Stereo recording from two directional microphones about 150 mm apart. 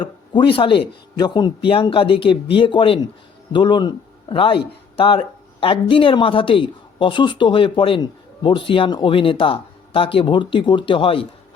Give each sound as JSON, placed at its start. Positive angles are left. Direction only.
{"t": 0.0, "sound": "a man's voice", "side_deg": 35}